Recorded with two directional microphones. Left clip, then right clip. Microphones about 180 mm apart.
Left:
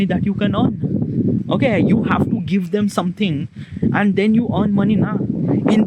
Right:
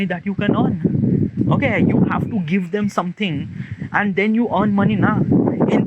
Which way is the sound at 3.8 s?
35° left (ahead or behind).